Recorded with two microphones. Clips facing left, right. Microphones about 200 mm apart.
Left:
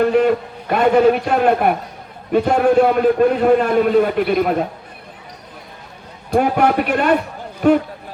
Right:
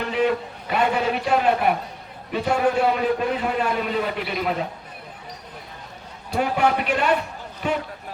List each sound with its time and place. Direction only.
0.0 s a man's voice: 50° left (ahead or behind)
6.3 s a man's voice: 55° left (ahead or behind)